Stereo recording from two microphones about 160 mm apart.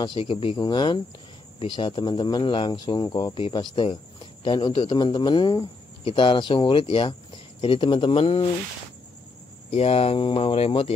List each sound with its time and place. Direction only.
0.0 s speech: 30° left (ahead or behind)
9.7 s speech: 40° left (ahead or behind)